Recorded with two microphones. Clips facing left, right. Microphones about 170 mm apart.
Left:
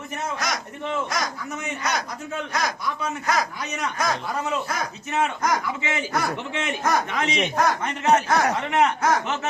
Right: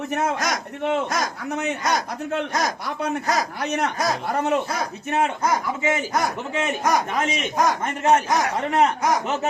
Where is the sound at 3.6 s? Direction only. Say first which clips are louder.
Right 4 dB; 60° right (ahead or behind).